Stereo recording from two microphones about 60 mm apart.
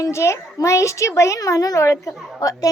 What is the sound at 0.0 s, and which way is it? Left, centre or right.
A child's voice, left.